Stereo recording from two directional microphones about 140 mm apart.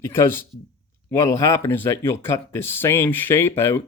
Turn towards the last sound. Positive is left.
turn(degrees=15)  # may be behind; listen again after turning